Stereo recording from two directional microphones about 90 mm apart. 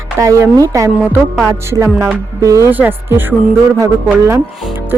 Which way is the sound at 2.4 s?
35° right (ahead or behind).